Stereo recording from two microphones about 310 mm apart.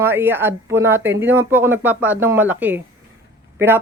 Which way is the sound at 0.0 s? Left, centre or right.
Centre.